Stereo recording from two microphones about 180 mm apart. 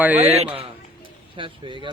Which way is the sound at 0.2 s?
35° right (ahead or behind).